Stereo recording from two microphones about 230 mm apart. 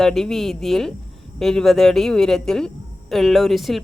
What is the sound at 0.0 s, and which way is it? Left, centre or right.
Speech, centre.